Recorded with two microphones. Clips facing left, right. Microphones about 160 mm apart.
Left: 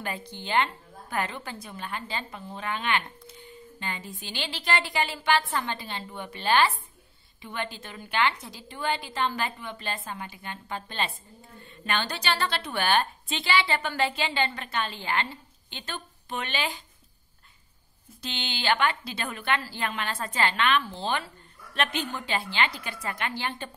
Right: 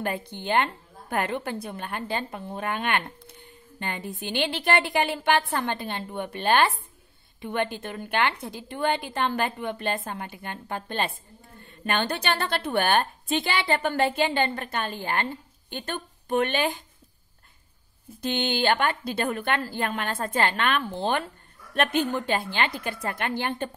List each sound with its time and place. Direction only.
0.0 s a woman's voice: 55° right (ahead or behind)
18.2 s a woman's voice: 50° right (ahead or behind)